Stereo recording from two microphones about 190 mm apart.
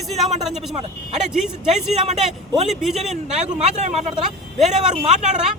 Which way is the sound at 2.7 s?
Centre (ahead or behind).